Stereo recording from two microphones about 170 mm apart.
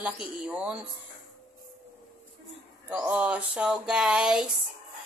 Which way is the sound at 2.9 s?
10° right (ahead or behind).